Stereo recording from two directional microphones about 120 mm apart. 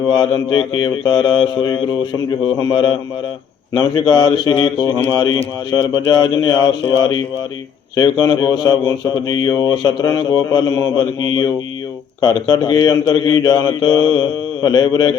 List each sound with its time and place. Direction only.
0.2 s speech: 40° left (ahead or behind)